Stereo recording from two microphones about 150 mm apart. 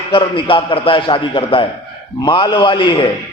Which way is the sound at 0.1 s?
35° left (ahead or behind).